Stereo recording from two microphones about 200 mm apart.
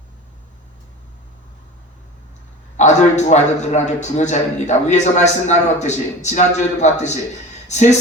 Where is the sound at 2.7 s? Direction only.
35° left (ahead or behind).